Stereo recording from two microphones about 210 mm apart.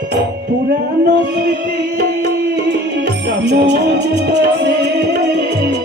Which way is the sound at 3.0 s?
50° right (ahead or behind).